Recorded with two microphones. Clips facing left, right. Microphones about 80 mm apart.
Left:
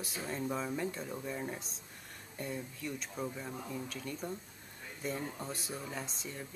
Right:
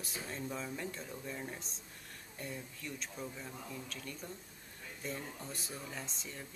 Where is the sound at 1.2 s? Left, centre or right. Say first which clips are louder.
Left 4 dB; centre.